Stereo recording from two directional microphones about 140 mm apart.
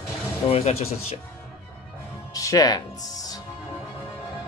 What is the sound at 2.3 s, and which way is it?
Music, 25° left (ahead or behind).